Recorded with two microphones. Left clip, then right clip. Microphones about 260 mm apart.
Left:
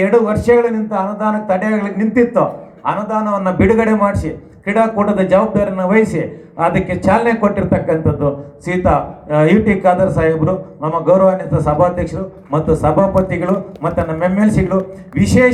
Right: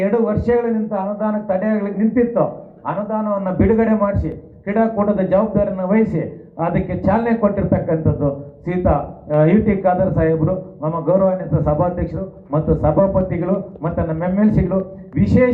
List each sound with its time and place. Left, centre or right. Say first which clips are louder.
0.0 s a man's voice: left 5 dB; left